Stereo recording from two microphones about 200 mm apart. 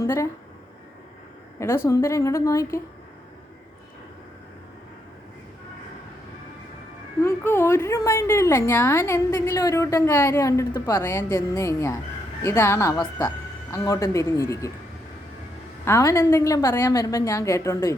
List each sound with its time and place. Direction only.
0.0 s speech: 15° left (ahead or behind)
1.5 s a woman's voice: 10° left (ahead or behind)
7.2 s a woman's voice: 10° left (ahead or behind)
15.8 s a woman's voice: 15° left (ahead or behind)